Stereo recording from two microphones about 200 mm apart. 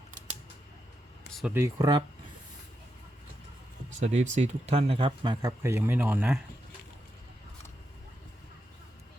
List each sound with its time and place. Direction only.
1.3 s a sound: centre (ahead or behind)
1.5 s speech: 15° right (ahead or behind)
4.0 s speech: 35° right (ahead or behind); by 6.4 s 5° right (ahead or behind)